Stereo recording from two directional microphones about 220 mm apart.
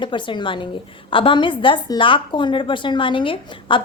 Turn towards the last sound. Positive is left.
turn(degrees=20)  # may be behind; listen again after turning